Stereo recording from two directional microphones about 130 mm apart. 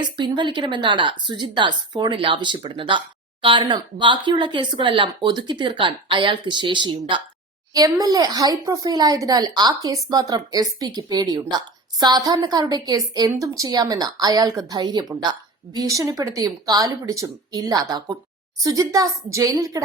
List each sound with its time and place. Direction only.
0.0 s speech: 35° right (ahead or behind)